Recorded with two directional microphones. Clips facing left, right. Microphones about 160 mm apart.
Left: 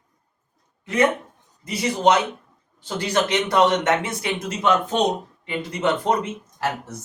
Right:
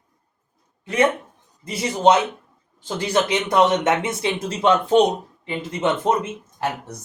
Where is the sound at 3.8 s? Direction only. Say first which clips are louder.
Right 1 dB; 25° right (ahead or behind).